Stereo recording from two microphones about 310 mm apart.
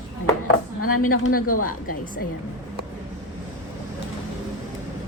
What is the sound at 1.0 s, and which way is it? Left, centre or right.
Speech, left.